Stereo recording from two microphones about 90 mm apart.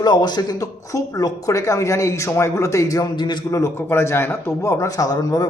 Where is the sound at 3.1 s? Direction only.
55° left (ahead or behind).